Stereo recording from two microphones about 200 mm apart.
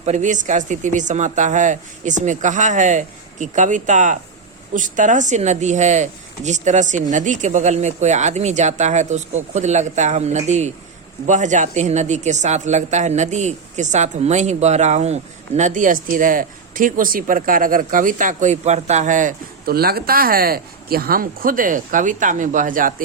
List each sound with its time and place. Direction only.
0.0 s speech: 35° right (ahead or behind)